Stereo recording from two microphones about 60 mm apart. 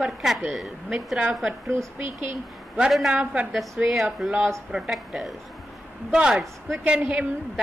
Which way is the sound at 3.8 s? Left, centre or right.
Centre.